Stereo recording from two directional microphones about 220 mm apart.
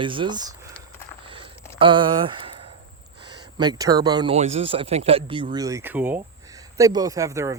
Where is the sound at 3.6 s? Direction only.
15° right (ahead or behind).